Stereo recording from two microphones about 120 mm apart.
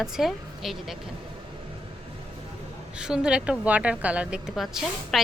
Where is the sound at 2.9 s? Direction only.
5° right (ahead or behind).